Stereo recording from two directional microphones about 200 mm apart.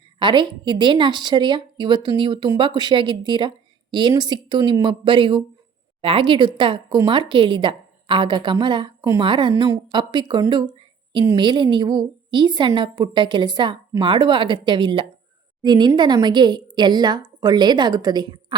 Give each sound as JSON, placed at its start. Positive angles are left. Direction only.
{"t": 0.2, "sound": "speech", "side_deg": -25}